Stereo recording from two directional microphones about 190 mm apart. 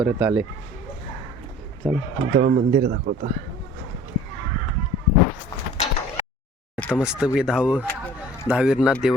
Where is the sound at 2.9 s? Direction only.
50° right (ahead or behind).